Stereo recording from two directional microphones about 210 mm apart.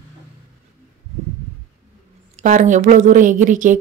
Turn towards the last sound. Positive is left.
turn(degrees=-40)  # may be behind; listen again after turning